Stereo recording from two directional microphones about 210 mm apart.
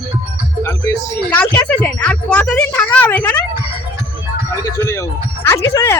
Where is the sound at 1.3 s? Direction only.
5° left (ahead or behind).